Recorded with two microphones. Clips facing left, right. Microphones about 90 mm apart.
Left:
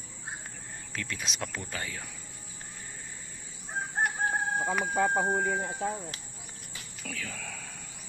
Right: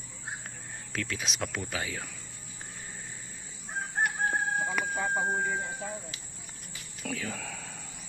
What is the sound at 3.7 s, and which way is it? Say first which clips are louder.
Chicken: even; 5° left (ahead or behind).